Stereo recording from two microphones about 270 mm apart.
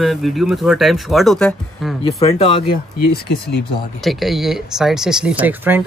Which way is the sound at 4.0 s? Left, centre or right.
Centre.